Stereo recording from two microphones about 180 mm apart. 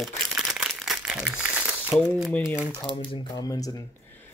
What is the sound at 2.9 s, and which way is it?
Speech, 30° left (ahead or behind).